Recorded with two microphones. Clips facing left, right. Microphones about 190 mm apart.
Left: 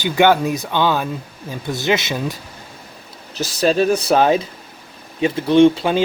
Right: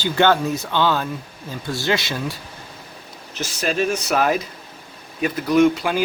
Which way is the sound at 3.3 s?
35° left (ahead or behind).